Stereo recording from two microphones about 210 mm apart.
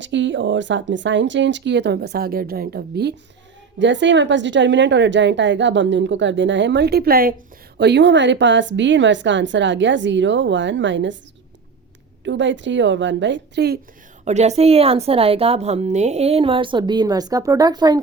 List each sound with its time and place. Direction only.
0.0 s a woman's voice: 60° right (ahead or behind); by 7.3 s 45° right (ahead or behind)
7.8 s a woman's voice: 55° right (ahead or behind)
12.2 s a woman's voice: 60° right (ahead or behind)
14.3 s a woman's voice: 30° right (ahead or behind)